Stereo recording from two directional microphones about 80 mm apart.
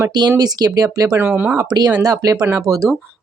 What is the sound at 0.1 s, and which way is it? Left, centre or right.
Speech, right.